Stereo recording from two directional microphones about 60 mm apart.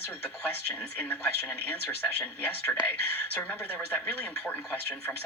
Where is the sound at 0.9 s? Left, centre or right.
Left.